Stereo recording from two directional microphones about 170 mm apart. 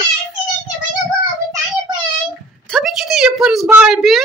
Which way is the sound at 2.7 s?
Centre (ahead or behind).